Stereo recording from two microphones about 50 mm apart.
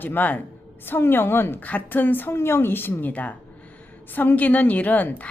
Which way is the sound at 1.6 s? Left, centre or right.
Left.